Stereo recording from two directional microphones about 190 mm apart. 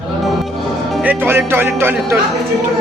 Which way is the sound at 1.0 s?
10° right (ahead or behind).